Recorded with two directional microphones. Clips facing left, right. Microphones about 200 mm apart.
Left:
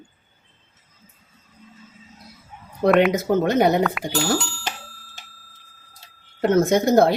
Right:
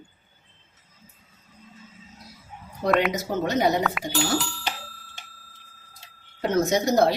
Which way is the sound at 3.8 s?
Centre (ahead or behind).